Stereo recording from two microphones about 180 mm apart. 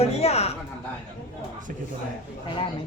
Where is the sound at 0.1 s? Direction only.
35° left (ahead or behind).